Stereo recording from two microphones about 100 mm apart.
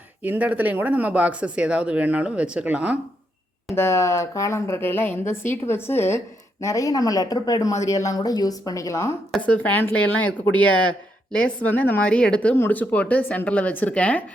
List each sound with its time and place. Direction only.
0.2 s speech: 15° right (ahead or behind)
3.8 s speech: 30° left (ahead or behind)
9.4 s speech: 15° left (ahead or behind)